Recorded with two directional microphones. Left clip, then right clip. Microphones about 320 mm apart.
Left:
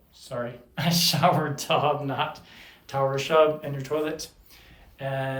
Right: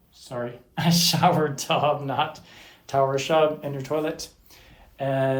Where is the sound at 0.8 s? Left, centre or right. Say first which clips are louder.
Right 2 dB; centre.